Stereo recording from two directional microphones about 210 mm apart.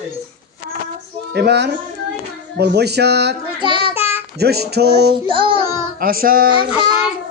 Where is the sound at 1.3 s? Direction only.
55° right (ahead or behind).